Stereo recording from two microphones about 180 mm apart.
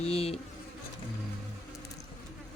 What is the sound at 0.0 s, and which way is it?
Insect, 35° left (ahead or behind).